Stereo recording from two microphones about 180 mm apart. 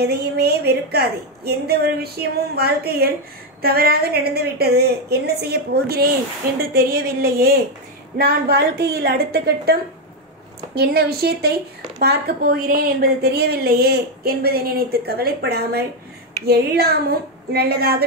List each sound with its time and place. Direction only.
0.0 s a woman's voice: 65° right (ahead or behind)